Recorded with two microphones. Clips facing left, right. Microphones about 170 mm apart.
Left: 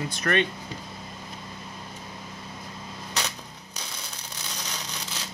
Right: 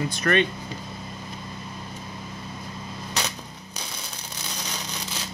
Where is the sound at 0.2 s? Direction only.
90° right.